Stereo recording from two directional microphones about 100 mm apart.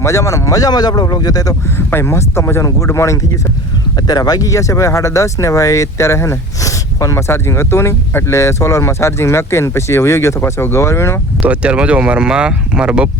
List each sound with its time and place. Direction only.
0.0 s speech: 30° left (ahead or behind)
1.9 s speech: 25° left (ahead or behind)
11.4 s speech: 15° right (ahead or behind)